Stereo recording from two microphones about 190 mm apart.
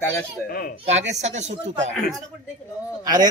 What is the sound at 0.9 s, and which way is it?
Speech, 35° right (ahead or behind).